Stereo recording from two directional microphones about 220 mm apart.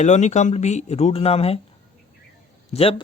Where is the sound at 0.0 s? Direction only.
30° left (ahead or behind).